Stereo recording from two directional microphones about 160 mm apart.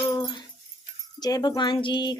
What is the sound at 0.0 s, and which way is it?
Dog, 25° left (ahead or behind).